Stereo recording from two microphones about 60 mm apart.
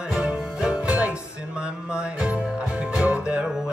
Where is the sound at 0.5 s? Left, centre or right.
Centre.